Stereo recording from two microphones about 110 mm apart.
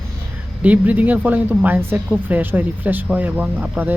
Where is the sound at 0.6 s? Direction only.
15° right (ahead or behind).